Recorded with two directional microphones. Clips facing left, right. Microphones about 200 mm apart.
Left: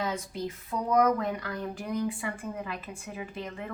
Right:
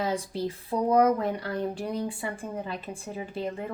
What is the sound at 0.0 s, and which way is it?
Speech, 30° right (ahead or behind).